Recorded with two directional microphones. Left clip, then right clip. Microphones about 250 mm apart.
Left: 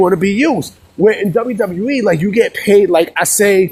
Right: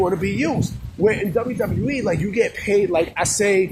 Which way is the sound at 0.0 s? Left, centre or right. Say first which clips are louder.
Left 9 dB; left.